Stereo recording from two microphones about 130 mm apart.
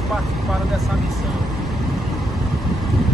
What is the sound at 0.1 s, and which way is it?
Speech, centre (ahead or behind).